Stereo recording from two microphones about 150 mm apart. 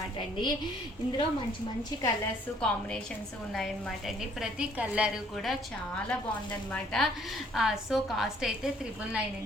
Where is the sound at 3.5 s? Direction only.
Centre (ahead or behind).